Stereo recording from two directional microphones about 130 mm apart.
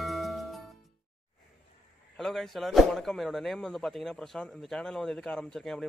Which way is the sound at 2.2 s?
Centre (ahead or behind).